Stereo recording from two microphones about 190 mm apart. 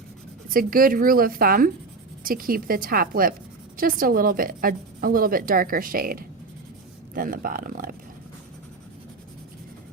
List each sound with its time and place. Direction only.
0.4 s a woman's voice: 50° right (ahead or behind)